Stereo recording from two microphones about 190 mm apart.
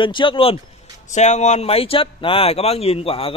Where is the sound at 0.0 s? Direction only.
25° left (ahead or behind).